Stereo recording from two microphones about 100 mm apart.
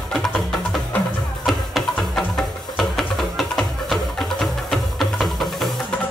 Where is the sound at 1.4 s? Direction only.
Centre (ahead or behind).